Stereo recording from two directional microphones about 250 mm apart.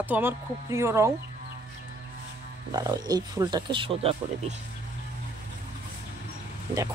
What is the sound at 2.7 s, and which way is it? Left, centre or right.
Speech, centre.